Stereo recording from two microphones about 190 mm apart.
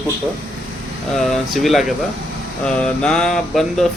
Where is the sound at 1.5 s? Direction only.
Centre (ahead or behind).